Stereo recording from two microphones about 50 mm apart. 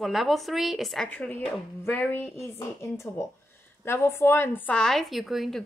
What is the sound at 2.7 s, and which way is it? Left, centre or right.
Speech, left.